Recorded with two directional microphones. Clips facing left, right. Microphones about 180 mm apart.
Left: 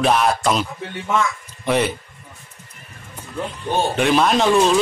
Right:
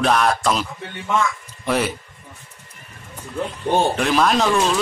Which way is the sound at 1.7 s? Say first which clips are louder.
Left 2 dB; 5° right (ahead or behind).